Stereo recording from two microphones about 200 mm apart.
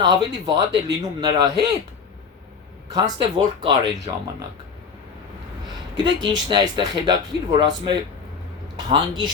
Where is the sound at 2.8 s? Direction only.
20° right (ahead or behind).